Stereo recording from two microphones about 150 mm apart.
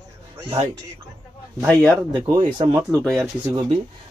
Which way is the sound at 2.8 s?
5° left (ahead or behind).